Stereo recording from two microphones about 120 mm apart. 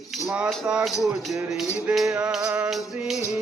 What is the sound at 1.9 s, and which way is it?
Music, 5° right (ahead or behind).